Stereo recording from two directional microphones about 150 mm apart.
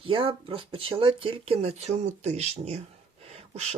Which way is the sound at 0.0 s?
35° right (ahead or behind).